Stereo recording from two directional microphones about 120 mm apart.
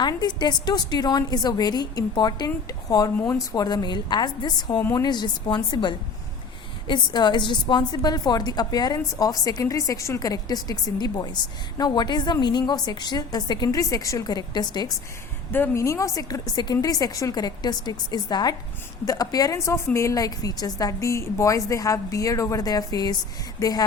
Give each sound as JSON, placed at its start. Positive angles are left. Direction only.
{"t": 0.0, "sound": "a woman's voice", "side_deg": 35}
{"t": 4.8, "sound": "a woman's voice", "side_deg": 20}
{"t": 5.0, "sound": "a woman's voice", "side_deg": 40}
{"t": 15.5, "sound": "a woman's voice", "side_deg": 20}